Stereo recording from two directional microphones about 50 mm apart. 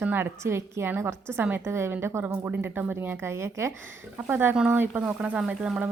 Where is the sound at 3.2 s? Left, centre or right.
Right.